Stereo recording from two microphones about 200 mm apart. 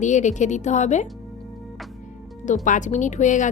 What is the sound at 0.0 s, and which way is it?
A woman's voice, 35° left (ahead or behind).